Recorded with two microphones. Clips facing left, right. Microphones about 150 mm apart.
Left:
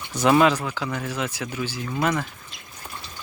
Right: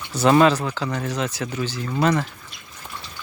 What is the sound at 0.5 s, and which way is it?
Speech, 15° right (ahead or behind).